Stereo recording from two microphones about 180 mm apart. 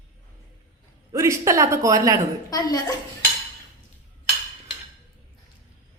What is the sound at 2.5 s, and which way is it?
Speech, 20° left (ahead or behind).